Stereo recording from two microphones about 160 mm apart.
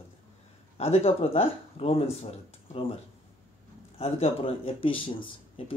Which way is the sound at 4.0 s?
40° left (ahead or behind).